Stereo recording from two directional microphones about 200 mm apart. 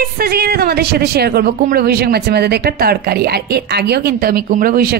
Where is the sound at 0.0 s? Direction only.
50° right (ahead or behind).